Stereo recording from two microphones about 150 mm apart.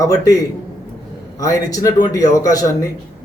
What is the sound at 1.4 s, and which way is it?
A man's voice, 20° left (ahead or behind).